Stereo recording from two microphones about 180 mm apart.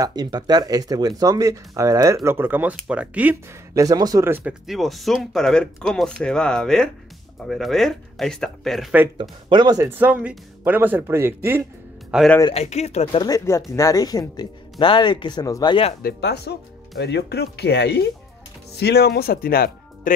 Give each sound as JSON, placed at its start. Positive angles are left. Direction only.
{"t": 0.0, "sound": "speech", "side_deg": -20}
{"t": 9.5, "sound": "speech", "side_deg": -25}
{"t": 12.1, "sound": "speech", "side_deg": 0}
{"t": 12.5, "sound": "speech", "side_deg": 35}
{"t": 16.0, "sound": "speech", "side_deg": 65}